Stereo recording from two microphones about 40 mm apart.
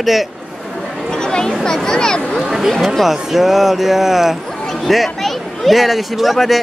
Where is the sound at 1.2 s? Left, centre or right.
Centre.